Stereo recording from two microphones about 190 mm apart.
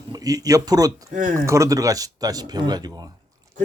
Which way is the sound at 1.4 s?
15° right (ahead or behind).